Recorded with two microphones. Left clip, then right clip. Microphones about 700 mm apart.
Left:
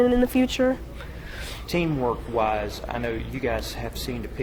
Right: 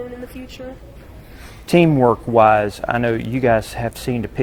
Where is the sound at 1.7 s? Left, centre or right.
Right.